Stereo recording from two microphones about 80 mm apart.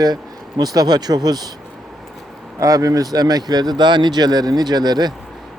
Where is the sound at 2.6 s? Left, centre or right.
Right.